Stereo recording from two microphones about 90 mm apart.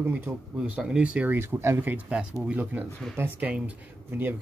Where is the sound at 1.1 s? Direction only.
25° right (ahead or behind).